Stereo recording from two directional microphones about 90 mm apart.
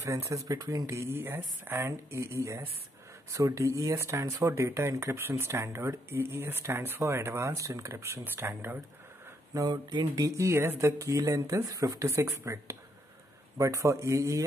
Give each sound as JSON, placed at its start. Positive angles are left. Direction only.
{"t": 0.0, "sound": "speech", "side_deg": -35}
{"t": 9.5, "sound": "speech", "side_deg": -45}